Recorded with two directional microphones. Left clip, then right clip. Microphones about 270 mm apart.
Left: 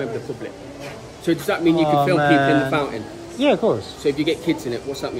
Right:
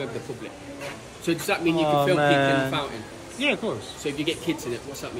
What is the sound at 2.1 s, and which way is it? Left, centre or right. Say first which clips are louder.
Speech: left 4 dB; centre.